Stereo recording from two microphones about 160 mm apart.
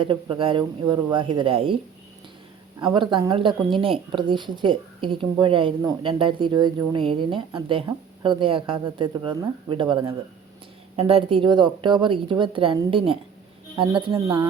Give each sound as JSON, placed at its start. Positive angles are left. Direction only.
{"t": 0.0, "sound": "a woman's voice", "side_deg": -30}
{"t": 2.8, "sound": "a woman's voice", "side_deg": -30}